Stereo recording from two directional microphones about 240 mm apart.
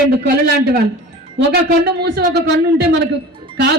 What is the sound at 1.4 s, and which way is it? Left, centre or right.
A man's voice, right.